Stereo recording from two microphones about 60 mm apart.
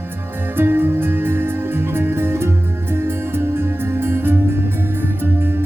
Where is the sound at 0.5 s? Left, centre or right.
Right.